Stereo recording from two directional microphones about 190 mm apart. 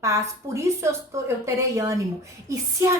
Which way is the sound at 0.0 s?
15° right (ahead or behind).